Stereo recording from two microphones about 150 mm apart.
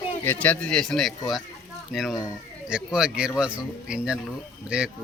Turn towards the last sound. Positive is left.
turn(degrees=-5)  # may be behind; listen again after turning